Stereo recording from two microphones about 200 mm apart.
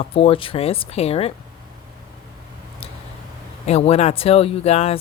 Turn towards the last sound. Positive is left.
turn(degrees=30)  # may be behind; listen again after turning